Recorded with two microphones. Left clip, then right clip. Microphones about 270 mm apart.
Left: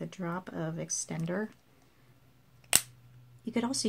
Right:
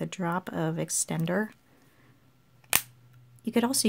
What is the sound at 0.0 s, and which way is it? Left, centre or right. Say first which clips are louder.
Speech: right 7 dB; right.